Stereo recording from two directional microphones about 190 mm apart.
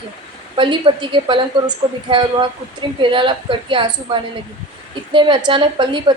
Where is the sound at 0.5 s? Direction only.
25° right (ahead or behind).